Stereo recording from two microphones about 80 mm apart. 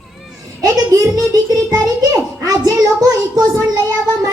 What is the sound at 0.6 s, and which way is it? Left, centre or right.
A child's voice, right.